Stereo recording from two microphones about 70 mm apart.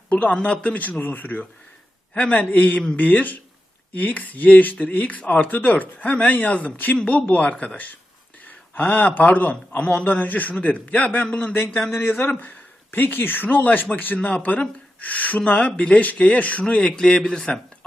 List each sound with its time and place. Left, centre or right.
0.1 s speech: centre
11.9 s speech: left; by 17.6 s centre